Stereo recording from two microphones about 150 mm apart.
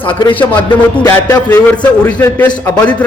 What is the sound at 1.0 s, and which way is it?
Speech, 20° left (ahead or behind).